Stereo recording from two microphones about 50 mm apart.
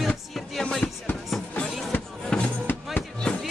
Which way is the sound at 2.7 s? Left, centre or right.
Left.